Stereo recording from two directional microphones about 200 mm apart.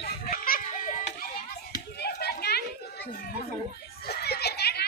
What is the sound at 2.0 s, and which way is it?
Children playing, 55° left (ahead or behind).